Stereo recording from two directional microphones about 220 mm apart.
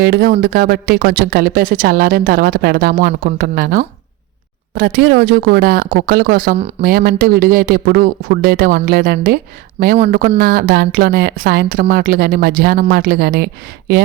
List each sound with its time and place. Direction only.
0.0 s speech: 45° right (ahead or behind)